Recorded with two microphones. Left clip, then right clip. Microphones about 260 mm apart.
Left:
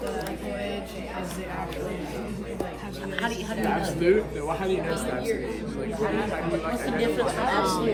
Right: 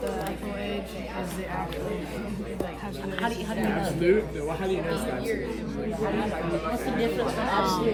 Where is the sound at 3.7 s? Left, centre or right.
Centre.